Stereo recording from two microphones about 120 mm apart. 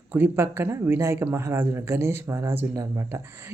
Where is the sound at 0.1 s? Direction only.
20° right (ahead or behind).